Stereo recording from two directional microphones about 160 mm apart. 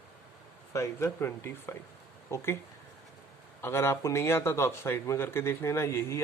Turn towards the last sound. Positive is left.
turn(degrees=15)  # may be behind; listen again after turning